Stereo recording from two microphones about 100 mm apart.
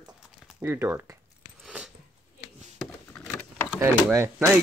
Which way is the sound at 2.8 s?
15° left (ahead or behind).